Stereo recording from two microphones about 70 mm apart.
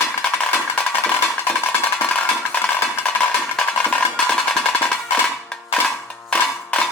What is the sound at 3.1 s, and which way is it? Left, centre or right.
Music, centre.